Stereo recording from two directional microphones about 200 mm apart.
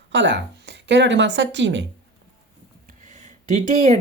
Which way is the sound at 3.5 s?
35° right (ahead or behind).